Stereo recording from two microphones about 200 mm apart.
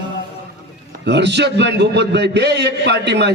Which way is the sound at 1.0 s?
60° right (ahead or behind).